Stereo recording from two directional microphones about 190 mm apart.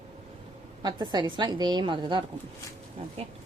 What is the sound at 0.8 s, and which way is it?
A woman's voice, 20° right (ahead or behind).